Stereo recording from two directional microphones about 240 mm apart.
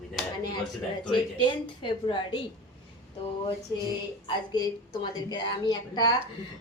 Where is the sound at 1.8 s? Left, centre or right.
Centre.